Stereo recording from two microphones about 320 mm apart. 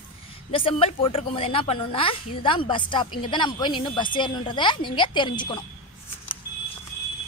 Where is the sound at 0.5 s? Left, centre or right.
Centre.